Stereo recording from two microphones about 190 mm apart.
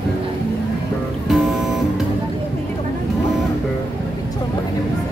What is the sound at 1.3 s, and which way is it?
Music, centre (ahead or behind).